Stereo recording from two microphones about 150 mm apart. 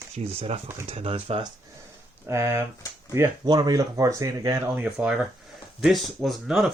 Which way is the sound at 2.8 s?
20° left (ahead or behind).